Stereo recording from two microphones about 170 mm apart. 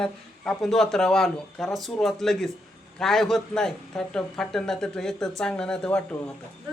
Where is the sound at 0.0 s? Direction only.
5° left (ahead or behind).